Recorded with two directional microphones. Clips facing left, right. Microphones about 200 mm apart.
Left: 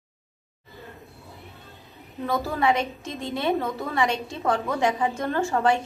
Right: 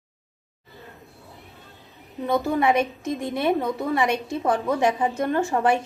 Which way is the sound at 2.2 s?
20° right (ahead or behind).